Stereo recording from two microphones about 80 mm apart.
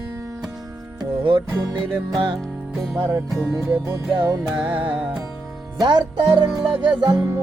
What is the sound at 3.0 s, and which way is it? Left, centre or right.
Music, right.